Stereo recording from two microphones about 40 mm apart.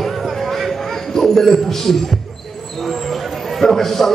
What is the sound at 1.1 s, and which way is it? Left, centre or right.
Speech, centre.